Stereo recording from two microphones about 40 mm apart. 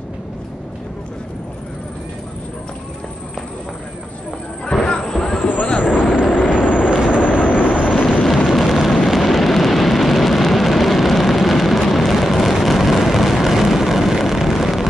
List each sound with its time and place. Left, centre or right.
4.8 s music: centre
5.7 s a sound: left
6.3 s vehicle: left
6.9 s vehicle: right
7.2 s vehicle: left
8.5 s vehicle: centre